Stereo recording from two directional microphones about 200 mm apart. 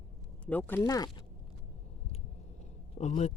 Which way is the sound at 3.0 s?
35° left (ahead or behind).